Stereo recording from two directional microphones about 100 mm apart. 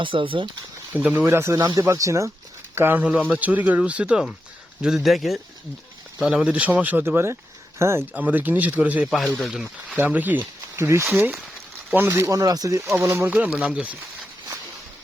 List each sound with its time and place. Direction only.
0.0 s speech: 60° right (ahead or behind)
0.9 s speech: 20° right (ahead or behind)
1.5 s speech: 40° right (ahead or behind)
2.7 s speech: 20° right (ahead or behind)
8.1 s speech: 15° right (ahead or behind)
9.0 s speech: centre (ahead or behind)
9.9 s speech: 15° right (ahead or behind)